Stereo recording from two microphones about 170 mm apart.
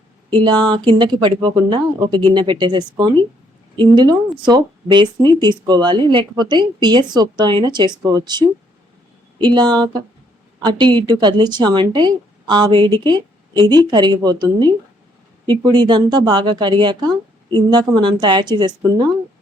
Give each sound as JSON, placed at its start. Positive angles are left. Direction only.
{"t": 0.3, "sound": "speech", "side_deg": -25}